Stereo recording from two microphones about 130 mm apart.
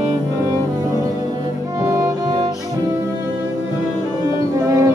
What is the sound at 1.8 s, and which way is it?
Music, 20° right (ahead or behind).